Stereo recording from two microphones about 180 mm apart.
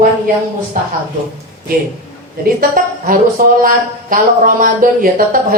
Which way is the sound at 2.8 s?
50° right (ahead or behind).